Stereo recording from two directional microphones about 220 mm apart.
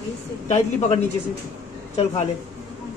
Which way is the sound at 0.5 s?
30° left (ahead or behind).